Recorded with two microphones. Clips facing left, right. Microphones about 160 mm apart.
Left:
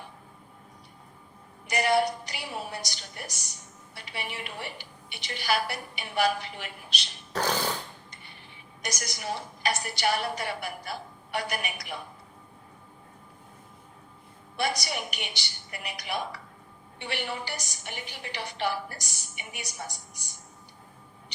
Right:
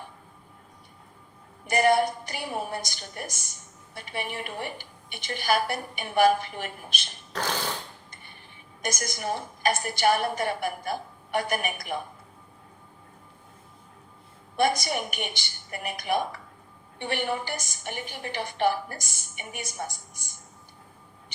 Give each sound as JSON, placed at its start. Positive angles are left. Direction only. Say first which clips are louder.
{"t": 1.6, "sound": "a woman's voice", "louder": "right 3 dB", "side_deg": -50}
{"t": 7.3, "sound": "a sound", "louder": "left 2 dB", "side_deg": 10}
{"t": 8.8, "sound": "a woman's voice", "louder": "right 5 dB", "side_deg": -50}
{"t": 14.5, "sound": "a woman's voice", "louder": "right 6 dB", "side_deg": -50}